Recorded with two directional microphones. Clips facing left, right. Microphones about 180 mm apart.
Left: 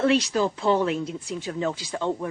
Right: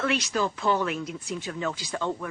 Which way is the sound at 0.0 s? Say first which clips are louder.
Left 5 dB; 30° left (ahead or behind).